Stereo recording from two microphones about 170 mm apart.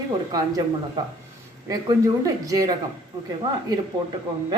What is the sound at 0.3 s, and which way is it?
Speech, 25° right (ahead or behind).